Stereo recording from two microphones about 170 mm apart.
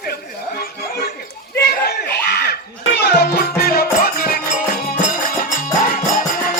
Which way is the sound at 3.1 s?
70° left (ahead or behind).